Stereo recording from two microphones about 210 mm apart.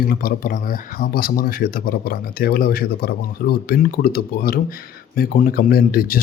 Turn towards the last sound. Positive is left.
turn(degrees=45)  # may be behind; listen again after turning